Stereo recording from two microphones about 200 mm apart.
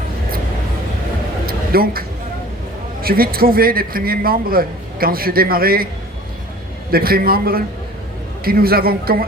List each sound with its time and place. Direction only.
1.5 s a sound: 50° right (ahead or behind)
3.0 s a man's voice: 50° right (ahead or behind)
6.9 s a man's voice: 50° right (ahead or behind)